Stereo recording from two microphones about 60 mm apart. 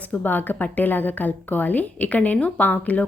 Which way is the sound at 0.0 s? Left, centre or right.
Left.